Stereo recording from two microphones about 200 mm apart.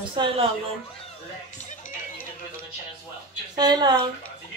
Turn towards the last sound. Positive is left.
turn(degrees=-20)  # may be behind; listen again after turning